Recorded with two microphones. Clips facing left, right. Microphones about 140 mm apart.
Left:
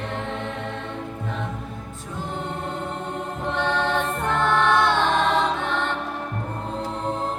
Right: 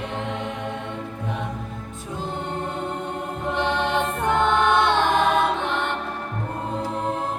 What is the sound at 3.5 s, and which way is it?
Music, 15° right (ahead or behind).